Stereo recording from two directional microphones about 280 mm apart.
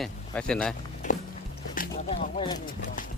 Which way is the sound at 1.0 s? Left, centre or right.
Left.